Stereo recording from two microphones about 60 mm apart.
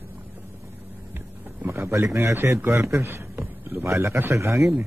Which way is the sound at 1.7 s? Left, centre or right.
Right.